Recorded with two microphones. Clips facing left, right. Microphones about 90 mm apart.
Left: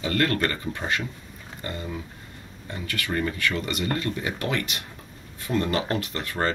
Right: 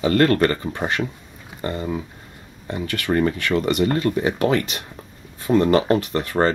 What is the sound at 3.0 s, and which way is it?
Speech, 30° right (ahead or behind).